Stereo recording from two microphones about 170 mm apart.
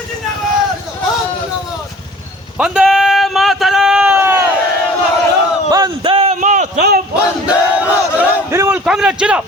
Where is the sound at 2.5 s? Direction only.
5° right (ahead or behind).